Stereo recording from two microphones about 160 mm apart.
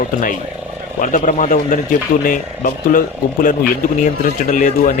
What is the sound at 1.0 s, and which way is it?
Speech, 55° left (ahead or behind).